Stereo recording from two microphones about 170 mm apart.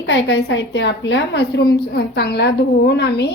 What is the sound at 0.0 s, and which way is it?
A woman's voice, 90° left.